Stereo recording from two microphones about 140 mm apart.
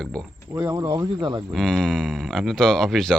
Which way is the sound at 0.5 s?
30° right (ahead or behind).